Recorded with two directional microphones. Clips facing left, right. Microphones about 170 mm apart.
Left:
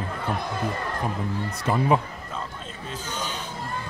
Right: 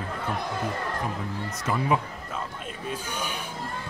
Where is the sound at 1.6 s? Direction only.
35° left (ahead or behind).